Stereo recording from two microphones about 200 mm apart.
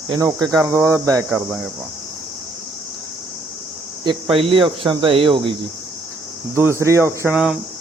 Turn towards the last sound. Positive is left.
turn(degrees=-5)  # may be behind; listen again after turning